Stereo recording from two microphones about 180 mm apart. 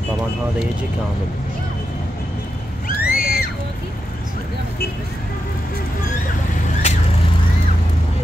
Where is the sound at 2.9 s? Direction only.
55° left (ahead or behind).